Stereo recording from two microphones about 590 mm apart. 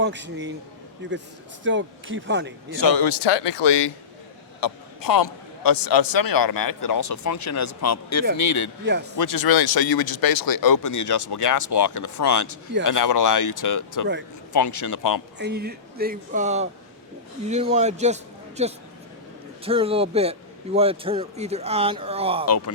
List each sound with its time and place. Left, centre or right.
0.0 s speech: centre
2.8 s a man's voice: left
8.8 s speech: centre
9.1 s a man's voice: left
15.4 s speech: centre
22.4 s speech: left